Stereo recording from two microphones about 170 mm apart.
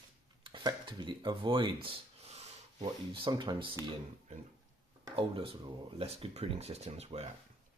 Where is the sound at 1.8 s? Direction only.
40° right (ahead or behind).